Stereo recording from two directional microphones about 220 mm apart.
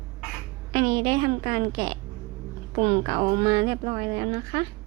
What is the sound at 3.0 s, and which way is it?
Speech, 25° right (ahead or behind).